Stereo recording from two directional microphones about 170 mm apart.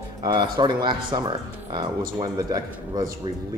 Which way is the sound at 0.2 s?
25° right (ahead or behind).